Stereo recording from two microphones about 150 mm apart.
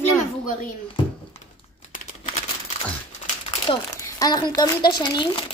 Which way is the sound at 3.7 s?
35° left (ahead or behind).